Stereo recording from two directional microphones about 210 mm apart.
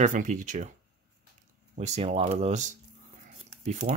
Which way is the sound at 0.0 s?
35° right (ahead or behind).